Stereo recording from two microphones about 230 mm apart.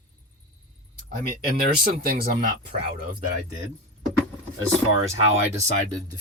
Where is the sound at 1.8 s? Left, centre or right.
Right.